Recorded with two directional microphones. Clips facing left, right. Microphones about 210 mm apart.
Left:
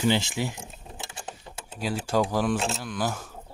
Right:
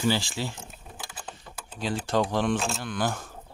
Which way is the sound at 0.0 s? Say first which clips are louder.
Left 2 dB; 20° left (ahead or behind).